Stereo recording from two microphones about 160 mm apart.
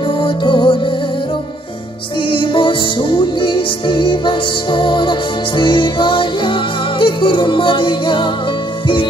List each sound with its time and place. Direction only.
0.2 s music: 30° left (ahead or behind)
2.2 s music: 30° left (ahead or behind)